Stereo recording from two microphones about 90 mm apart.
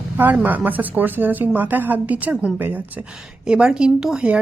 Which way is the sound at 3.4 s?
10° right (ahead or behind).